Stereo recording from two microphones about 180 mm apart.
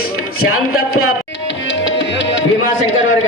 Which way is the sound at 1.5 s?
90° left.